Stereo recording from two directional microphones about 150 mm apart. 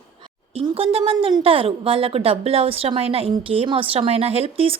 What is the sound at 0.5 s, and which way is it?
A woman's voice, 40° right (ahead or behind).